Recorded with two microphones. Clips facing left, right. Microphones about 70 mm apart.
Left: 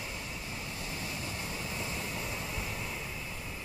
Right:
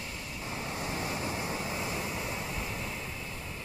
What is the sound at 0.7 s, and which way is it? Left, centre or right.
Waves, right.